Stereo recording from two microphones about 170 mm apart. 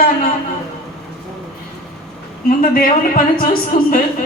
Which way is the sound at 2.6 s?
55° left (ahead or behind).